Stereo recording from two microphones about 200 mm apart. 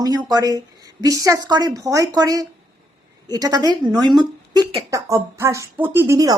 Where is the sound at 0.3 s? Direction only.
20° right (ahead or behind).